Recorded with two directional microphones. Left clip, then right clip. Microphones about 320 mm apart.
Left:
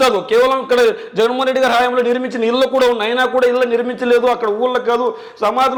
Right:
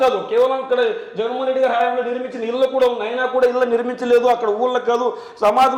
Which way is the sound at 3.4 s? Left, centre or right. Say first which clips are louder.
Right 1 dB; left.